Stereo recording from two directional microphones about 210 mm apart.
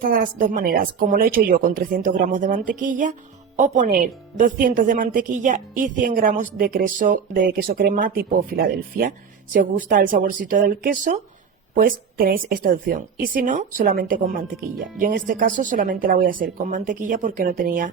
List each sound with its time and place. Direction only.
0.0 s a woman's voice: 40° right (ahead or behind)